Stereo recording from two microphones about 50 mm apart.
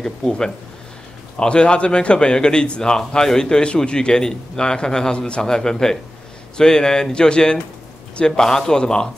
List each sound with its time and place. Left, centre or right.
0.0 s a man's voice: centre